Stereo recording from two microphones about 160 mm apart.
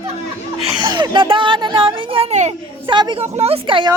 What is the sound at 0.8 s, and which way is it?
Speech, 25° right (ahead or behind).